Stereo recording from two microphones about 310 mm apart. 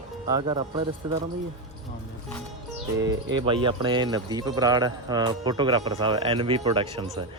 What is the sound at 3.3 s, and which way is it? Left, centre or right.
Speech, centre.